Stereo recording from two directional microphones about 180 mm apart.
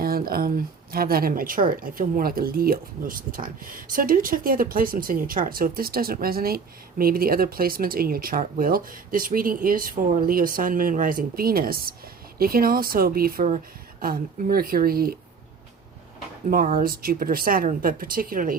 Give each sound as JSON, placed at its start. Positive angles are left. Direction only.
{"t": 0.0, "sound": "speech", "side_deg": -55}
{"t": 16.6, "sound": "speech", "side_deg": -50}